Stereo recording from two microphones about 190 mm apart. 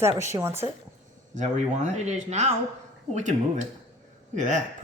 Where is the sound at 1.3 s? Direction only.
40° right (ahead or behind).